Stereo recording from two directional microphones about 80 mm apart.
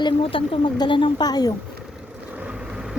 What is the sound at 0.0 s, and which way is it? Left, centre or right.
Speech, left.